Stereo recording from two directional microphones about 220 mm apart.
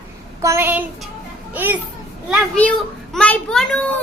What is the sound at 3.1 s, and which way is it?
Speech, 5° left (ahead or behind).